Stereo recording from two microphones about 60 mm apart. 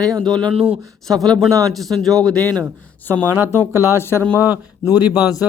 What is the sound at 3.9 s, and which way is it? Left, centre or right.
Speech, left.